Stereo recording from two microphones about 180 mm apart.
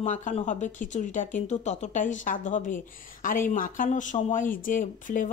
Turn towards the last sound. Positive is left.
turn(degrees=45)  # may be behind; listen again after turning